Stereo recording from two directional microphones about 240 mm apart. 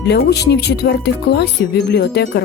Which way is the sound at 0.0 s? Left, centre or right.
Left.